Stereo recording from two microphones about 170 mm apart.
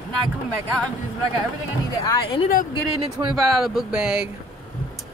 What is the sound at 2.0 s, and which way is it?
Speech, 30° left (ahead or behind).